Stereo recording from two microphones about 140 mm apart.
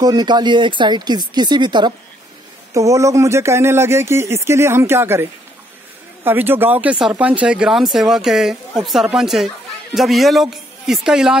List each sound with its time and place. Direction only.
0.0 s speech: 30° right (ahead or behind)
6.2 s speech: 15° right (ahead or behind)